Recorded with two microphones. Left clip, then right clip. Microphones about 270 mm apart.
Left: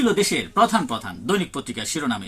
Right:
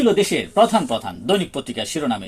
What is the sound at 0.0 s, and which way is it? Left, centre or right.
Speech, centre.